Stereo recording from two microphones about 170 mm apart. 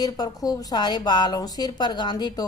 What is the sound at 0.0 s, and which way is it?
Speech, 20° left (ahead or behind).